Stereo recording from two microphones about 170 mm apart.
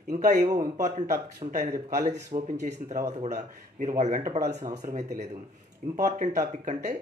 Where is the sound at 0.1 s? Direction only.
50° right (ahead or behind).